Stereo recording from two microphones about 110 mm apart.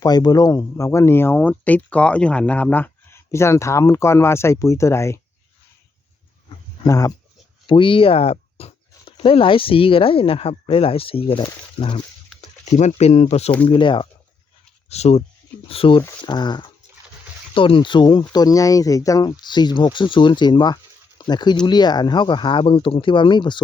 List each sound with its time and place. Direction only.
0.0 s speech: 40° left (ahead or behind)
6.8 s speech: 30° left (ahead or behind)
7.7 s speech: 50° left (ahead or behind)
11.8 s speech: 45° left (ahead or behind)
12.4 s speech: 90° left; by 13.5 s 75° left (ahead or behind)
13.7 s speech: 50° left (ahead or behind)
14.8 s speech: 75° left (ahead or behind)
15.6 s speech: 60° left (ahead or behind)
16.2 s speech: 40° left (ahead or behind)